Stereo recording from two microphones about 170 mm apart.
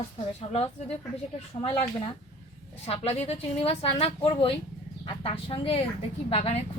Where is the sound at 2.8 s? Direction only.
35° left (ahead or behind).